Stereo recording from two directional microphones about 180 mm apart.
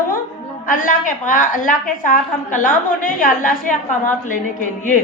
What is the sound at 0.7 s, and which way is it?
A woman's voice, 45° left (ahead or behind).